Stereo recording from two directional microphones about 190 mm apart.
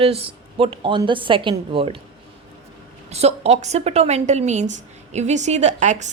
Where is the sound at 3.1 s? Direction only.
35° right (ahead or behind).